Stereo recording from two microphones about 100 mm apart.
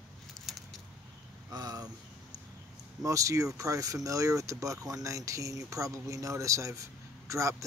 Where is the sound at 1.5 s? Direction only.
40° right (ahead or behind).